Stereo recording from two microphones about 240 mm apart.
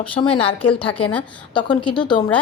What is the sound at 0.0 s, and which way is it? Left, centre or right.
A woman's voice, left.